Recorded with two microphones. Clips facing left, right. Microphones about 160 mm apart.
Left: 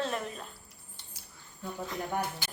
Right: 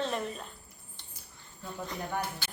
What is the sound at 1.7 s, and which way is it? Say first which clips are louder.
Speech: left 1 dB; 5° left (ahead or behind).